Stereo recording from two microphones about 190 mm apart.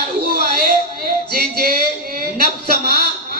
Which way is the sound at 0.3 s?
50° right (ahead or behind).